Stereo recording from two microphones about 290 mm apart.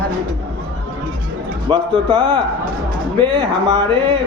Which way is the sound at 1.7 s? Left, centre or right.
Centre.